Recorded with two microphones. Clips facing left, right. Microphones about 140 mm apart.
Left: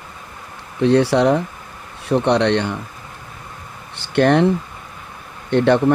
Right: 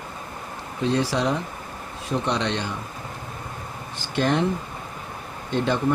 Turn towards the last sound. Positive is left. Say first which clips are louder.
# left 8 dB
turn(degrees=65)  # may be behind; listen again after turning